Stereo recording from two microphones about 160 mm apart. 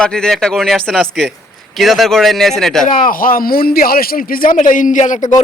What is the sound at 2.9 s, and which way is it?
A man's voice, 55° left (ahead or behind).